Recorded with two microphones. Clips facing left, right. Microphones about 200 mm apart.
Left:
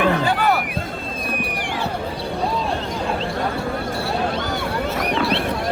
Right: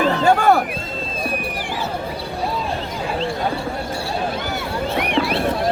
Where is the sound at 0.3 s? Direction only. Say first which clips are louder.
Right 5 dB; 50° right (ahead or behind).